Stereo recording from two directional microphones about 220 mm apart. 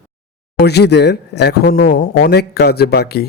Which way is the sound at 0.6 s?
50° left (ahead or behind).